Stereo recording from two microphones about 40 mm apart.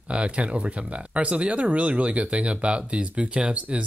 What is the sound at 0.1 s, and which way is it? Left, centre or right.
Speech, right.